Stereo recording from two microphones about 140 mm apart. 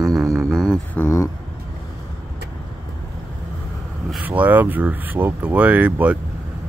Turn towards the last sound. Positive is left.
turn(degrees=-10)  # may be behind; listen again after turning